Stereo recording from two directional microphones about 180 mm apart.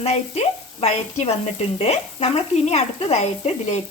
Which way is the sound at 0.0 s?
35° left (ahead or behind).